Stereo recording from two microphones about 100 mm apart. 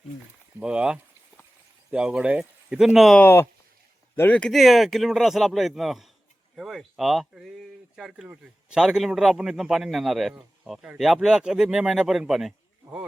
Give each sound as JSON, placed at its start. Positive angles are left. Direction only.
{"t": 0.6, "sound": "speech", "side_deg": -10}
{"t": 3.2, "sound": "speech", "side_deg": 20}
{"t": 4.4, "sound": "speech", "side_deg": 5}